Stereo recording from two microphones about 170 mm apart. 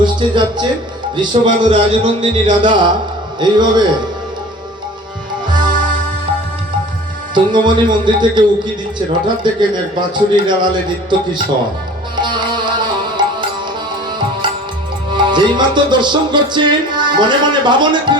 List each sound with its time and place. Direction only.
0.0 s speech: 25° right (ahead or behind)
1.1 s music: 25° right (ahead or behind)
5.5 s music: 25° right (ahead or behind)
7.3 s music: 25° right (ahead or behind)
15.1 s music: 25° right (ahead or behind)